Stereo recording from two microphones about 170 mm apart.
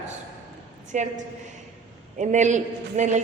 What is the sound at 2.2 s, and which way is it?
A woman's voice, 45° right (ahead or behind).